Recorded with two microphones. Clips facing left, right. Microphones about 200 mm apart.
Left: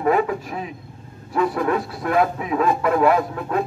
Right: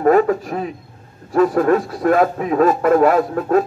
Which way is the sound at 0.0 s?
45° right (ahead or behind).